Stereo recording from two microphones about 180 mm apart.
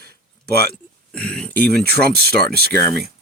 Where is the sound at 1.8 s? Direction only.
60° right (ahead or behind).